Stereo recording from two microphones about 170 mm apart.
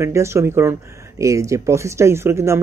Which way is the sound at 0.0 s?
15° right (ahead or behind).